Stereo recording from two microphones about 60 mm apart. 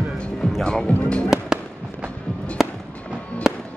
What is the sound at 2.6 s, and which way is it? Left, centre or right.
Fireworks, centre.